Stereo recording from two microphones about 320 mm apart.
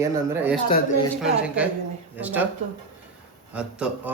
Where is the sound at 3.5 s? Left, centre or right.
Centre.